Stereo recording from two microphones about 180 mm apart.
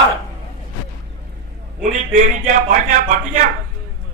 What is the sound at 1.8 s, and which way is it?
A man's voice, 40° right (ahead or behind).